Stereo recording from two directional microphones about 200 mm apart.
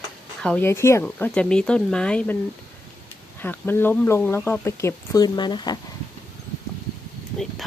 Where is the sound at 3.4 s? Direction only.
10° left (ahead or behind).